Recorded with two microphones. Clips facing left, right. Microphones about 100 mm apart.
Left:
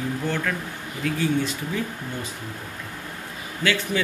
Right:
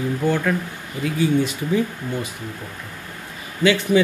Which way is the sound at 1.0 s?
15° right (ahead or behind).